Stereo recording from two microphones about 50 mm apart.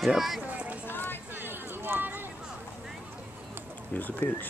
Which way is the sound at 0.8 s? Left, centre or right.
Left.